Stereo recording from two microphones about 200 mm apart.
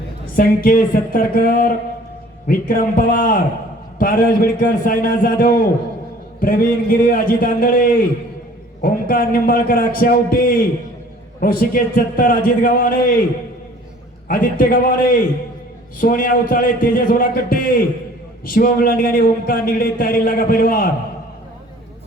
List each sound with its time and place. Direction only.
0.3 s a man's voice: 45° left (ahead or behind)
14.3 s a man's voice: 45° left (ahead or behind)